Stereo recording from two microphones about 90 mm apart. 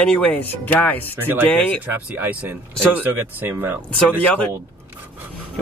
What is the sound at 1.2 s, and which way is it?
Speech, 20° right (ahead or behind).